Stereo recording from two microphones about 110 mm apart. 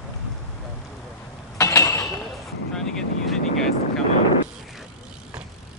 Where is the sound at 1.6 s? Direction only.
25° left (ahead or behind).